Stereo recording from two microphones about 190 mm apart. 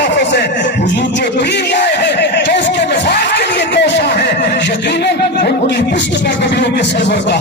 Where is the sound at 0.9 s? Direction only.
65° left (ahead or behind).